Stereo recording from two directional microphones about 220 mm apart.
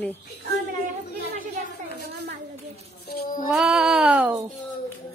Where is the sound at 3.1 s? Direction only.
40° left (ahead or behind).